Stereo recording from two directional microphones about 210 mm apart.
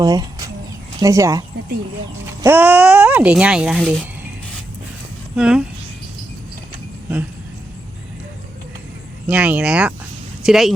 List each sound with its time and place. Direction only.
0.0 s speech: 20° right (ahead or behind)
5.4 s speech: 5° right (ahead or behind)
9.2 s speech: 5° right (ahead or behind)